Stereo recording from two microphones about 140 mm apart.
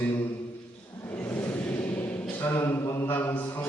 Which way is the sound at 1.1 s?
10° left (ahead or behind).